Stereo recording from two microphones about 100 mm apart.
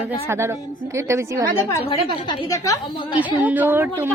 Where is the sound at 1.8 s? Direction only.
55° left (ahead or behind).